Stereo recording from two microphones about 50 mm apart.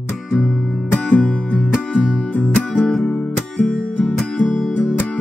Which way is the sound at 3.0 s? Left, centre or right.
Left.